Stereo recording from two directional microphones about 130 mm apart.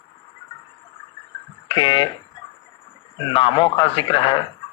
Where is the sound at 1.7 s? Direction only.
40° left (ahead or behind).